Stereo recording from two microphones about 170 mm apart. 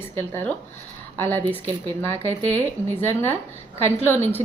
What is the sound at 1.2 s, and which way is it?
A woman's voice, 10° left (ahead or behind).